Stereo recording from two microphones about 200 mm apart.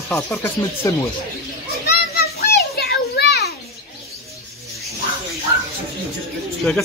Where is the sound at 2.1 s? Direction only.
50° left (ahead or behind).